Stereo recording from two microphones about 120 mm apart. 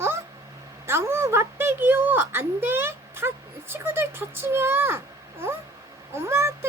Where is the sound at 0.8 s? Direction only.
20° right (ahead or behind).